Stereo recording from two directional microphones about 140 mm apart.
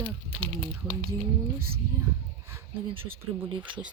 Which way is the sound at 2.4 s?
20° right (ahead or behind).